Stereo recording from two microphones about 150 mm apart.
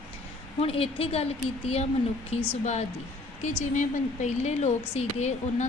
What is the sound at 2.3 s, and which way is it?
A woman's voice, 50° left (ahead or behind).